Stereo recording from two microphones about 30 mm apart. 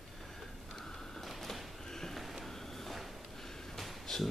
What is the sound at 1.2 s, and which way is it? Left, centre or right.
Sliding door, centre.